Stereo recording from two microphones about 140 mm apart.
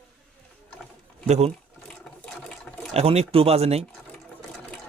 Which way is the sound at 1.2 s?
55° right (ahead or behind).